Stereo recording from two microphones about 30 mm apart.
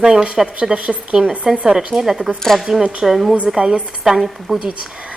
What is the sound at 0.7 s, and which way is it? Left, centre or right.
Speech, right.